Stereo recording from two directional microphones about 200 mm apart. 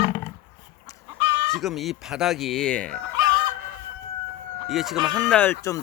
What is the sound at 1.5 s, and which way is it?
Speech, centre (ahead or behind).